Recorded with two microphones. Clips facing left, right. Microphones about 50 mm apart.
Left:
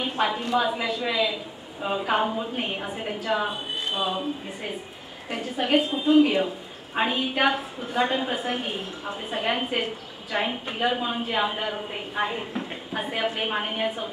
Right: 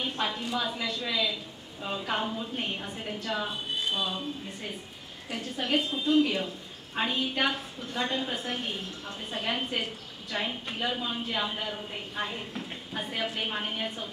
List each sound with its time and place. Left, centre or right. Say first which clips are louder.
0.0 s a woman's voice: left 6 dB; left
5.8 s a woman's voice: left 6 dB; centre